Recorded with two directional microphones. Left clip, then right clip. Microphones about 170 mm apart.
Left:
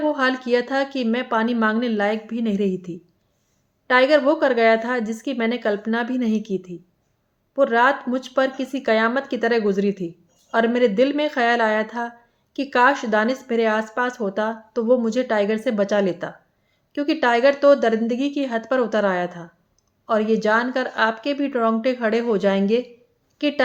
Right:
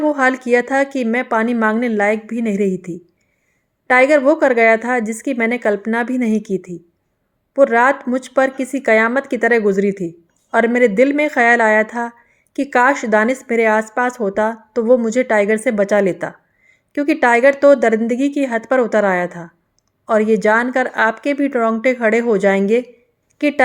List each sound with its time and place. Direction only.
0.0 s speech: 45° right (ahead or behind)